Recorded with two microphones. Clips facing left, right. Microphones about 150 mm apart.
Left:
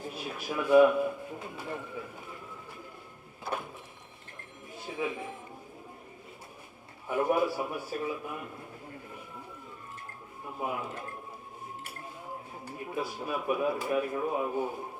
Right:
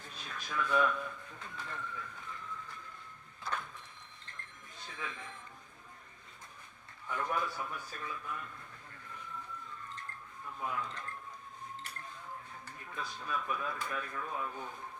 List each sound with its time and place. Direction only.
0.0 s speech: 10° left (ahead or behind)
4.9 s speech: 15° left (ahead or behind)
7.1 s a man's voice: 15° left (ahead or behind)
10.4 s speech: 15° left (ahead or behind)
12.6 s speech: 15° left (ahead or behind)